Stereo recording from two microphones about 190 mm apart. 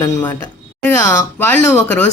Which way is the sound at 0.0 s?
20° left (ahead or behind).